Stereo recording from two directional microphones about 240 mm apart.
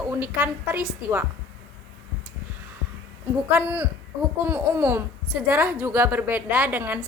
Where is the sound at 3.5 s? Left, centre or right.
Centre.